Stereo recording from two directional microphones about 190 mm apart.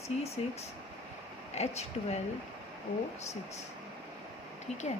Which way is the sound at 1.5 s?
35° left (ahead or behind).